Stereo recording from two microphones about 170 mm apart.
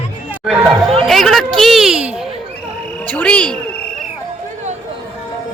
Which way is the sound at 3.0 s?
10° left (ahead or behind).